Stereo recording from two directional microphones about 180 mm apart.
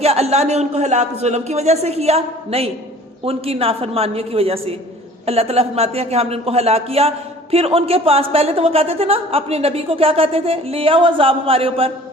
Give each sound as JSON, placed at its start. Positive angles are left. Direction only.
{"t": 0.0, "sound": "a woman's voice", "side_deg": -35}